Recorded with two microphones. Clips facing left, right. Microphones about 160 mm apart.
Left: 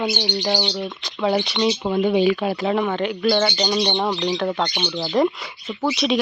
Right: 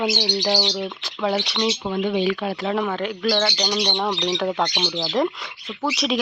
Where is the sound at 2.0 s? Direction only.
10° left (ahead or behind); by 4.7 s 5° right (ahead or behind).